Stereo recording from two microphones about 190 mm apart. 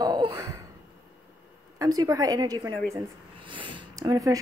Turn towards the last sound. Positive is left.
turn(degrees=-20)  # may be behind; listen again after turning